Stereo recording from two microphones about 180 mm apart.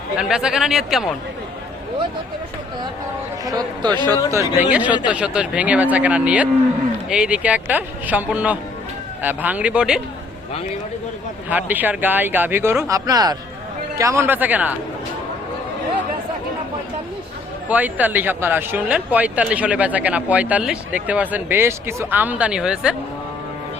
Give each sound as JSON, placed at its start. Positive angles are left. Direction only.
{"t": 0.2, "sound": "speech", "side_deg": -5}
{"t": 3.4, "sound": "speech", "side_deg": -20}
{"t": 4.7, "sound": "speech", "side_deg": -10}
{"t": 11.4, "sound": "speech", "side_deg": -10}
{"t": 17.7, "sound": "speech", "side_deg": -10}